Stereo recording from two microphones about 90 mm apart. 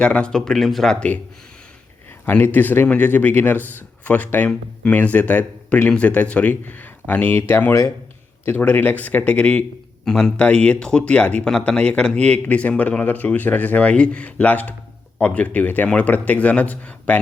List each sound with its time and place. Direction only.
0.0 s speech: 10° left (ahead or behind)
2.3 s speech: 20° left (ahead or behind)
8.4 s speech: 20° left (ahead or behind)